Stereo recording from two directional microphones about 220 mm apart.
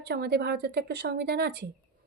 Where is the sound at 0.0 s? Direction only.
50° right (ahead or behind).